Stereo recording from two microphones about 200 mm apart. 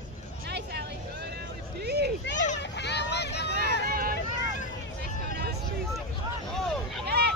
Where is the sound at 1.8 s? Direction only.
55° right (ahead or behind).